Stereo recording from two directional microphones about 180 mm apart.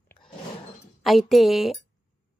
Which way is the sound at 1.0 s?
Centre (ahead or behind).